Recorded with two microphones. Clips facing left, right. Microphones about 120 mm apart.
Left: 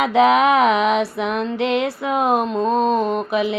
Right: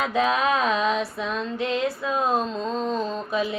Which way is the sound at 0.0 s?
75° left (ahead or behind).